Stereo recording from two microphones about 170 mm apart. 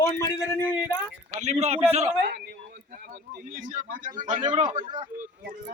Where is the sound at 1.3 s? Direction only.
40° right (ahead or behind).